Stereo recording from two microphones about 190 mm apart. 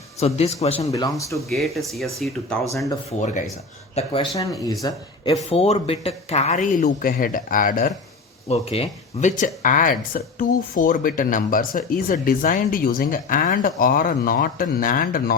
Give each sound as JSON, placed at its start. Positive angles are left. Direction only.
{"t": 0.2, "sound": "speech", "side_deg": 35}
{"t": 0.9, "sound": "speech", "side_deg": 20}
{"t": 1.5, "sound": "speech", "side_deg": 0}
{"t": 3.1, "sound": "speech", "side_deg": 35}
{"t": 4.4, "sound": "speech", "side_deg": 20}
{"t": 8.4, "sound": "speech", "side_deg": 30}
{"t": 9.6, "sound": "speech", "side_deg": 45}